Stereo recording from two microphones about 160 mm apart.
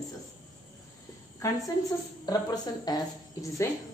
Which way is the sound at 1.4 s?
20° left (ahead or behind).